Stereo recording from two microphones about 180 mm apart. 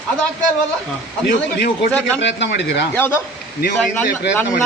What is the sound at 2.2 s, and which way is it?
Speech, 80° left.